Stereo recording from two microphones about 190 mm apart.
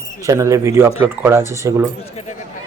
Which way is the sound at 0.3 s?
15° right (ahead or behind).